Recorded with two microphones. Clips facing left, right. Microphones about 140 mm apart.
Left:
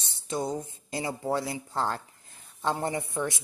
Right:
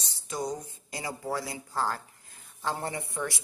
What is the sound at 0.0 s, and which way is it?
A woman's voice, 25° left (ahead or behind).